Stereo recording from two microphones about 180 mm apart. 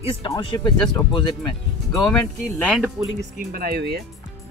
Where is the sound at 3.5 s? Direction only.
60° right (ahead or behind).